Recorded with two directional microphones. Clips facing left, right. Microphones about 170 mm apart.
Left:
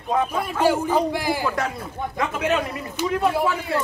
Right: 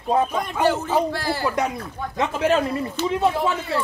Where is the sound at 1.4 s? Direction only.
20° right (ahead or behind).